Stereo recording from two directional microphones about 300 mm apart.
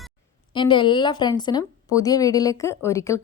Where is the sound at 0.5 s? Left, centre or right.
Centre.